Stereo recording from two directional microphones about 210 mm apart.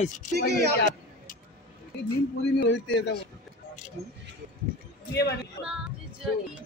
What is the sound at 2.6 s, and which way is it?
Speech, 55° left (ahead or behind).